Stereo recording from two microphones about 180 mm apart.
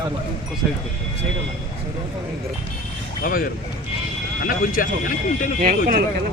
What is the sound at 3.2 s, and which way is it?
Speech, 50° left (ahead or behind).